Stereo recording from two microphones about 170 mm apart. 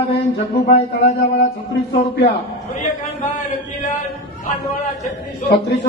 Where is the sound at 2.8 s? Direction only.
50° left (ahead or behind).